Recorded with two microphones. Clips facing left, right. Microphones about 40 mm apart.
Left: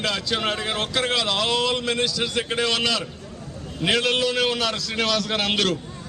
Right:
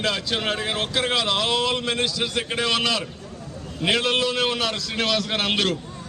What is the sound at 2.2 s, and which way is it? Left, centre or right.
A man's voice, centre.